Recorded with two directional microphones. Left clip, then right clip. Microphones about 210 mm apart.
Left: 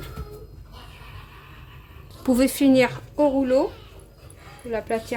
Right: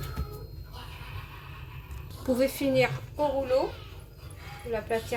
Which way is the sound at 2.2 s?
45° left (ahead or behind).